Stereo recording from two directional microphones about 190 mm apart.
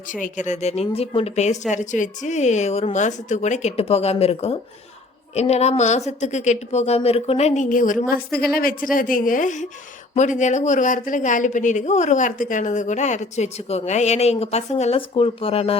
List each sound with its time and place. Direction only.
0.1 s a woman's voice: 40° left (ahead or behind)